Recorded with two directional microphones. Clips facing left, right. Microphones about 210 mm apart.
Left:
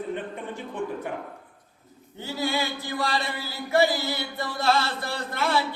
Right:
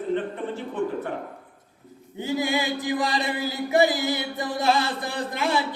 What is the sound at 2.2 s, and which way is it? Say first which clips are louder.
Chant: right 3 dB; 15° right (ahead or behind).